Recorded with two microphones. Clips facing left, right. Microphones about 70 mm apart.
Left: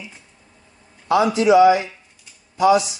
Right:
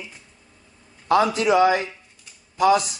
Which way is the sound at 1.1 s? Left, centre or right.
Right.